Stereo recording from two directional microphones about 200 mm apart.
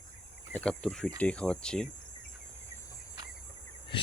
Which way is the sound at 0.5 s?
5° left (ahead or behind).